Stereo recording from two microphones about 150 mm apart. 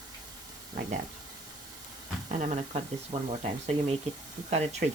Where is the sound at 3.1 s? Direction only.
50° right (ahead or behind).